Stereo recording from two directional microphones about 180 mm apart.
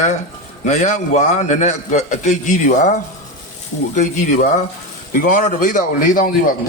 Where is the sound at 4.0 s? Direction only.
40° left (ahead or behind).